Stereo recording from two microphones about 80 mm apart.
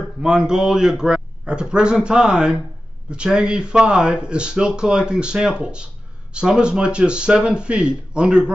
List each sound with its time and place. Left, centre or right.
0.2 s speech: centre